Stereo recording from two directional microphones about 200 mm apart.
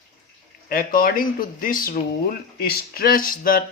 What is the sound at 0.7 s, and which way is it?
Speech, 45° left (ahead or behind).